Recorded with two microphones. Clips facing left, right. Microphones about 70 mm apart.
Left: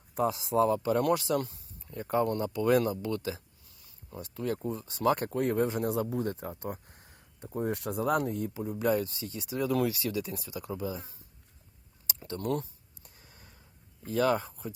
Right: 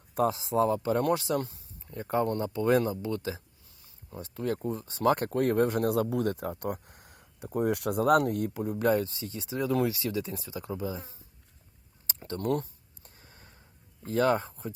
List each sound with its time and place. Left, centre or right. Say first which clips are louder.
0.3 s speech: left 2 dB; right
8.8 s speech: right 2 dB; right
9.0 s speech: right 1 dB; right
12.0 s a sound: right 3 dB; right
14.0 s speech: right 2 dB; right